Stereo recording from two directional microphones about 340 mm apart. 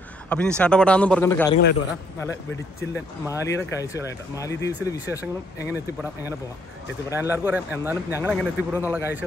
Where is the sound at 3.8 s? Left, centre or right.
Centre.